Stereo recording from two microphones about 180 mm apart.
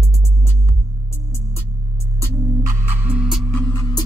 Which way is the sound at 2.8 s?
10° right (ahead or behind).